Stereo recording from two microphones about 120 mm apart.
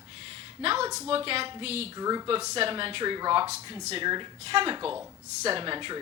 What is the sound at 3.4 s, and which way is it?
A woman's voice, 55° right (ahead or behind).